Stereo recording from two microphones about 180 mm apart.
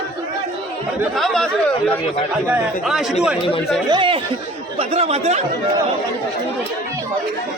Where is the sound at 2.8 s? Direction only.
Centre (ahead or behind).